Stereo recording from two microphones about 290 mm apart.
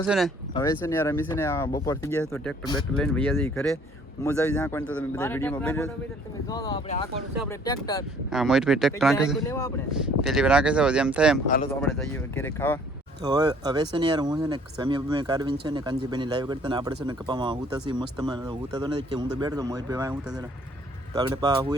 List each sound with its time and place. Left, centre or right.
0.5 s a man's voice: centre
8.3 s a man's voice: centre
10.0 s speech: centre
11.4 s speech: left
11.8 s a man's voice: centre
13.2 s speech: centre